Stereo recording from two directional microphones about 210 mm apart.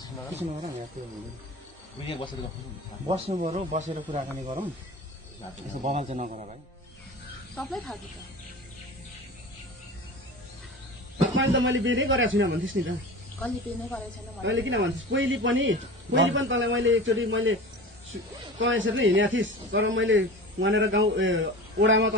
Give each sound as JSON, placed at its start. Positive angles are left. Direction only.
{"t": 0.4, "sound": "a man's voice", "side_deg": -30}
{"t": 2.0, "sound": "speech", "side_deg": 25}
{"t": 3.1, "sound": "speech", "side_deg": -30}
{"t": 5.9, "sound": "a man's voice", "side_deg": -30}
{"t": 7.5, "sound": "speech", "side_deg": 5}
{"t": 11.3, "sound": "a man's voice", "side_deg": -60}
{"t": 14.4, "sound": "a man's voice", "side_deg": -60}
{"t": 18.6, "sound": "a man's voice", "side_deg": -65}